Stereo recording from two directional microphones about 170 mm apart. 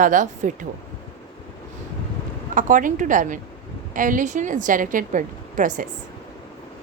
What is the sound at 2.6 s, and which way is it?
A woman's voice, 50° right (ahead or behind).